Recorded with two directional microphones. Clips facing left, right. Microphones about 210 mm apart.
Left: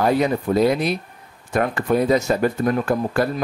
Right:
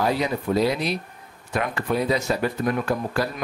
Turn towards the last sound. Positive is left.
turn(degrees=50)  # may be behind; listen again after turning